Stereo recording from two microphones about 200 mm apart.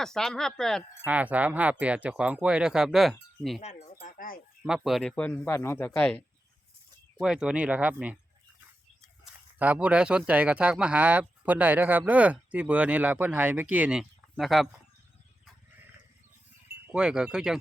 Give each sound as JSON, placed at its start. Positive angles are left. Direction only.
{"t": 0.0, "sound": "speech", "side_deg": 0}
{"t": 3.6, "sound": "speech", "side_deg": 35}
{"t": 3.9, "sound": "a sound", "side_deg": 45}
{"t": 4.6, "sound": "speech", "side_deg": 0}
{"t": 7.2, "sound": "speech", "side_deg": -5}
{"t": 9.2, "sound": "speech", "side_deg": -5}
{"t": 16.8, "sound": "speech", "side_deg": -5}